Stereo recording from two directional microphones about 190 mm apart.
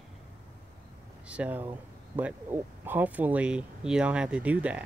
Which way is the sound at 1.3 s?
10° right (ahead or behind).